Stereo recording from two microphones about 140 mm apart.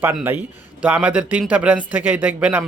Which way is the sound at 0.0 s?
10° right (ahead or behind).